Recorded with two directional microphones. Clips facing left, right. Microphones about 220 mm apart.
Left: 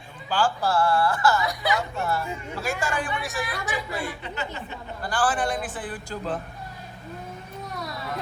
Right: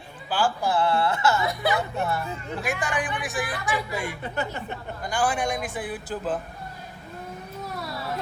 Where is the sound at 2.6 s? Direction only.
15° right (ahead or behind).